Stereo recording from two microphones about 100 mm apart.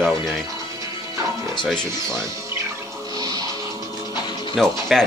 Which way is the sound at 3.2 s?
40° right (ahead or behind).